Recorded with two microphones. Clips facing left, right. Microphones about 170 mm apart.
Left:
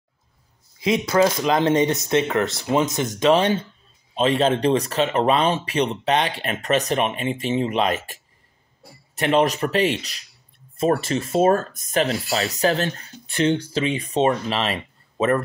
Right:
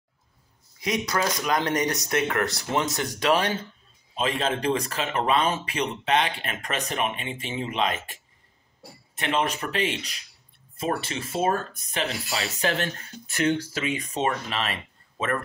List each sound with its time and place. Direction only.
0.7 s speech: 25° left (ahead or behind)